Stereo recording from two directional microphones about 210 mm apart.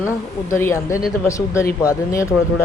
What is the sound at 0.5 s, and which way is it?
Speech, 10° left (ahead or behind).